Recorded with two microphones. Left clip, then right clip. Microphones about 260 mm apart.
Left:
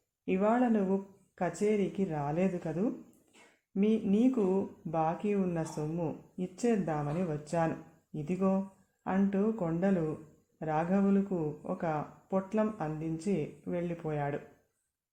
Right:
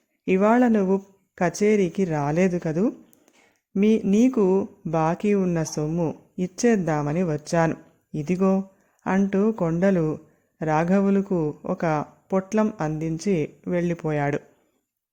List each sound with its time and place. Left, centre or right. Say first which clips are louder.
0.3 s speech: right 10 dB; right